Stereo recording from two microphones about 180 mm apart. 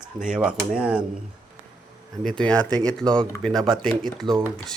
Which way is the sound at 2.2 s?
5° left (ahead or behind).